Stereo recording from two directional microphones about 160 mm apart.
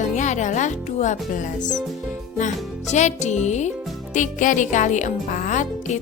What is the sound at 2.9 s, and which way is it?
Speech, 45° left (ahead or behind).